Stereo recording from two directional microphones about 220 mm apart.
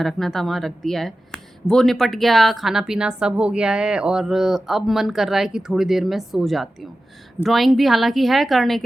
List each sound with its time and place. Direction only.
0.0 s speech: centre (ahead or behind)